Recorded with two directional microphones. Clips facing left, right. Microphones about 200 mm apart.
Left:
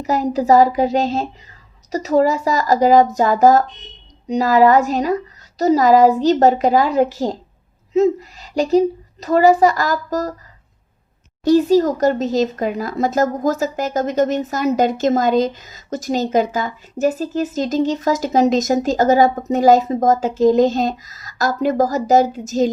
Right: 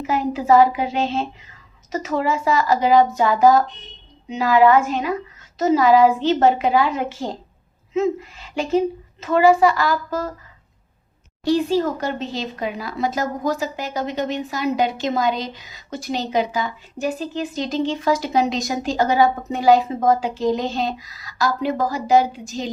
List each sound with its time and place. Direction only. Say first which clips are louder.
0.0 s a woman's voice: left 4 dB; 40° left (ahead or behind)
11.4 s speech: left 6 dB; 40° left (ahead or behind)